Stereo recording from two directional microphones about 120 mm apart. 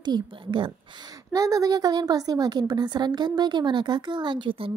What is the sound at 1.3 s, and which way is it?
A woman's voice, 30° right (ahead or behind).